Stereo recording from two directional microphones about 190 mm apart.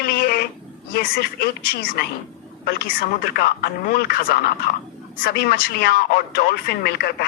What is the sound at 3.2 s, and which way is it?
A man's voice, 55° left (ahead or behind).